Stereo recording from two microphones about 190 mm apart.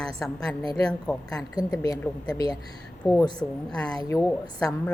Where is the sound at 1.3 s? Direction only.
20° left (ahead or behind).